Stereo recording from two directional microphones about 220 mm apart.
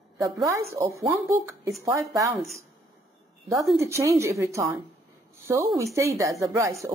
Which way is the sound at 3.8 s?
10° right (ahead or behind).